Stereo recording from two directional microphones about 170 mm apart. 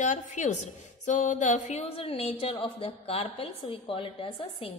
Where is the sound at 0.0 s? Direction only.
45° left (ahead or behind).